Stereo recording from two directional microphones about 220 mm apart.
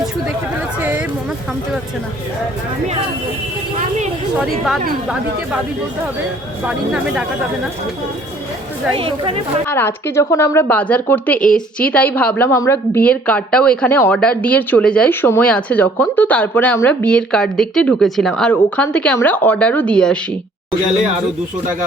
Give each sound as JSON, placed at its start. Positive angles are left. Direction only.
{"t": 0.8, "sound": "speech", "side_deg": -5}
{"t": 4.4, "sound": "speech", "side_deg": 0}
{"t": 6.7, "sound": "speech", "side_deg": -5}
{"t": 9.0, "sound": "a woman's voice", "side_deg": -25}
{"t": 9.6, "sound": "a woman's voice", "side_deg": 10}